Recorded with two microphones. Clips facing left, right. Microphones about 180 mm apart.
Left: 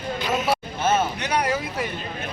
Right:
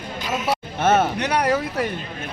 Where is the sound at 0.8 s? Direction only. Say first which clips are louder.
Right 6 dB; 65° right (ahead or behind).